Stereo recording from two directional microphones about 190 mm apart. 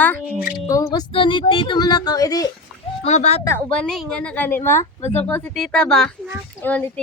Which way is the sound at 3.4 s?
10° left (ahead or behind).